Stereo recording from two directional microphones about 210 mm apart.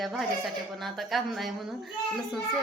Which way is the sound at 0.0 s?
Centre (ahead or behind).